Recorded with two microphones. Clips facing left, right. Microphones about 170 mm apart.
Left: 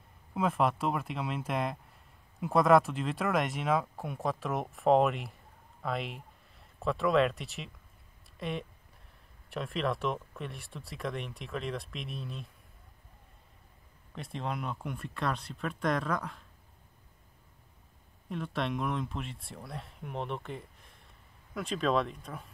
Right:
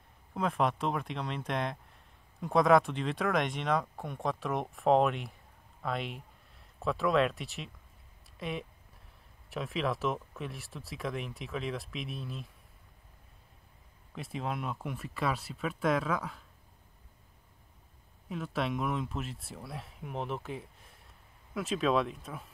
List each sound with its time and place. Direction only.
0.3 s speech: centre (ahead or behind)
14.1 s speech: 5° right (ahead or behind)
18.3 s speech: 5° right (ahead or behind)